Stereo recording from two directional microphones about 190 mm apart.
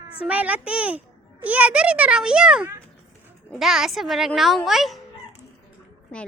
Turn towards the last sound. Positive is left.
turn(degrees=0)  # may be behind; listen again after turning